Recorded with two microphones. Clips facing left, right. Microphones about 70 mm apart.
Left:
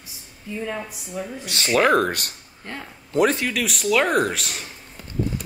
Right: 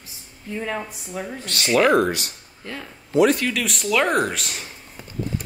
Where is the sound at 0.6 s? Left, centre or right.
Right.